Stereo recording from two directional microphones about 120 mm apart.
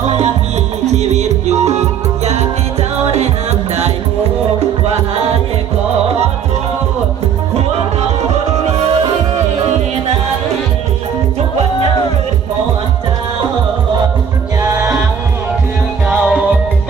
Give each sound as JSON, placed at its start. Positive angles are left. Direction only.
{"t": 0.9, "sound": "music", "side_deg": -65}
{"t": 16.0, "sound": "music", "side_deg": -10}